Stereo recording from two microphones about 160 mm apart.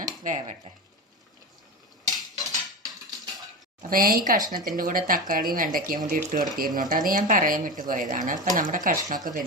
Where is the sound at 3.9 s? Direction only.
65° right (ahead or behind).